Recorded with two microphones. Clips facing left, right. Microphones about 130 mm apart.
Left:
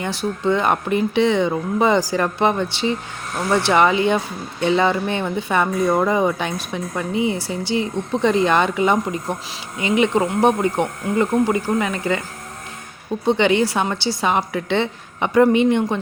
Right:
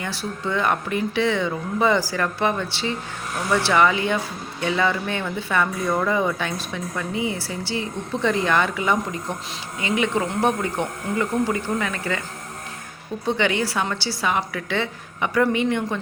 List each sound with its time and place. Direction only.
0.0 s speech: 20° left (ahead or behind)
13.2 s speech: 20° left (ahead or behind)